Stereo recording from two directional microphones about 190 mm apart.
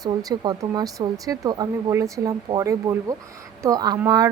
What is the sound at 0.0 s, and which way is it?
Speech, 20° right (ahead or behind).